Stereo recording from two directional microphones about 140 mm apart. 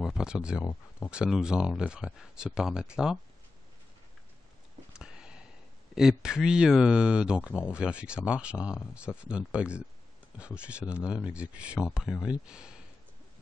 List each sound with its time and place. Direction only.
0.0 s speech: 5° right (ahead or behind)
0.7 s speech: 15° left (ahead or behind)
1.1 s speech: 5° right (ahead or behind)
4.9 s a sound: 5° right (ahead or behind)
5.9 s speech: 5° right (ahead or behind)
11.0 s speech: 15° left (ahead or behind)
11.2 s speech: 10° right (ahead or behind)